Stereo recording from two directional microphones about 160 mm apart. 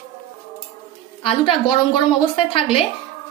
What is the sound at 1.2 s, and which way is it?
A woman's voice, 30° left (ahead or behind).